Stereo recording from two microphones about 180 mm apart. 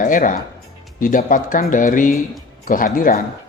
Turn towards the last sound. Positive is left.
turn(degrees=50)  # may be behind; listen again after turning